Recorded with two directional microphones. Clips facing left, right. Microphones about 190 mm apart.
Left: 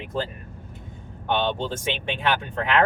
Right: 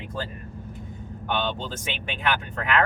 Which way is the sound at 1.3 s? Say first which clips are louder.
Left 4 dB; 25° left (ahead or behind).